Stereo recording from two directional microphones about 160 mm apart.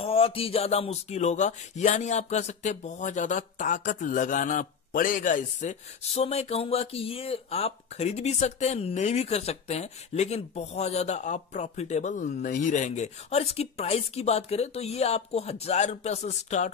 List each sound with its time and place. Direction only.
0.0 s speech: 35° left (ahead or behind)